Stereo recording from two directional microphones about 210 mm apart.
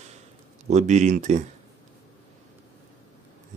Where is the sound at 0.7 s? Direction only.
35° right (ahead or behind).